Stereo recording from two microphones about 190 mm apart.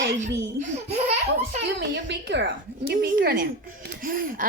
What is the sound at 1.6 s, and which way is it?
Speech, 65° right (ahead or behind).